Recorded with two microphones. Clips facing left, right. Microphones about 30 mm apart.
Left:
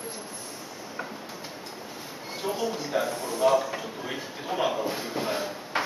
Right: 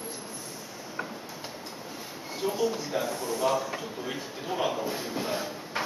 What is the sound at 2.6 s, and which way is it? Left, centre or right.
Speech, centre.